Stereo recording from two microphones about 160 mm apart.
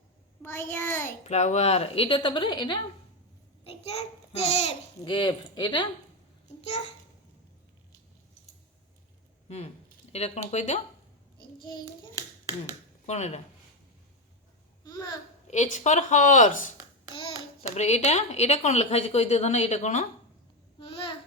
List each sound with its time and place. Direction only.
0.4 s a child's voice: 15° left (ahead or behind)
1.2 s speech: 45° left (ahead or behind); by 2.7 s 30° left (ahead or behind)
3.6 s a child's voice: 40° left (ahead or behind)
10.1 s a woman's voice: 40° left (ahead or behind)
12.1 s finger snapping: 20° right (ahead or behind)
13.1 s a woman's voice: 45° left (ahead or behind)
14.8 s babbling: 25° left (ahead or behind)
15.4 s a woman's voice: 45° left (ahead or behind)
17.7 s a woman's voice: 45° left (ahead or behind)
20.7 s babbling: 30° left (ahead or behind)